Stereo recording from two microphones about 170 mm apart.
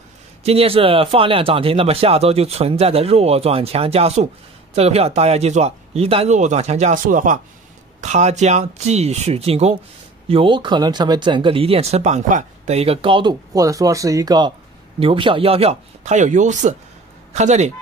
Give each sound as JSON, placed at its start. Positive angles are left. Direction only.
{"t": 0.4, "sound": "speech", "side_deg": -35}